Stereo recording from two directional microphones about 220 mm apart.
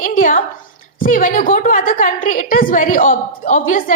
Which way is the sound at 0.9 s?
35° left (ahead or behind).